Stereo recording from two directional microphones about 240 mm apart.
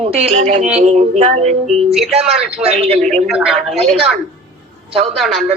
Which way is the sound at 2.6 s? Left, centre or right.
Right.